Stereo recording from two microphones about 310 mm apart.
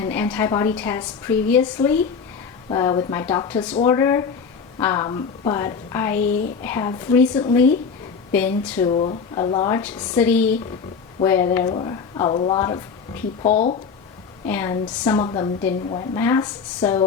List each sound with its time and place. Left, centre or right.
0.0 s a sound: centre
0.8 s a woman's voice: centre
6.1 s speech: left
6.6 s a woman's voice: centre
8.9 s a woman's voice: centre
14.4 s a woman's voice: centre